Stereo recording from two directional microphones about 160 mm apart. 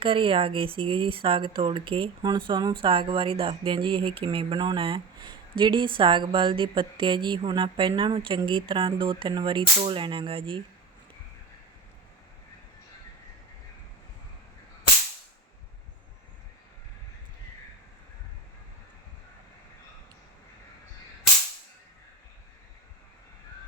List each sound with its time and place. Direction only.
0.0 s speech: 35° right (ahead or behind)